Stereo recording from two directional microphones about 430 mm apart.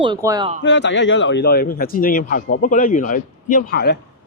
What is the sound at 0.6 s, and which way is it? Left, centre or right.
A man's voice, left.